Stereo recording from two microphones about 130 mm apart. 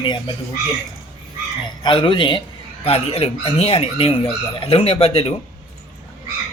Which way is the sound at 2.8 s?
50° left (ahead or behind).